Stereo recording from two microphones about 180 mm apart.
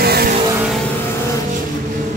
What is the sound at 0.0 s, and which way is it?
Vehicle, 60° right (ahead or behind).